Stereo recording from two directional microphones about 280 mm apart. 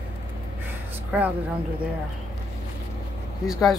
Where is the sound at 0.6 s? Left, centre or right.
Centre.